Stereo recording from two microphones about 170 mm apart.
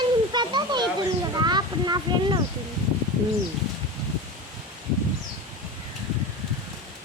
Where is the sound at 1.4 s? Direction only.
25° right (ahead or behind).